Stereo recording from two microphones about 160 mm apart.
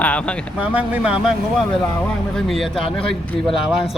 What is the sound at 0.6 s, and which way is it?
Speech, 10° right (ahead or behind).